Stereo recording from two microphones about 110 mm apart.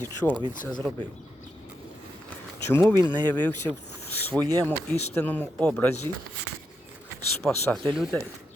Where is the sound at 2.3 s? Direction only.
20° left (ahead or behind).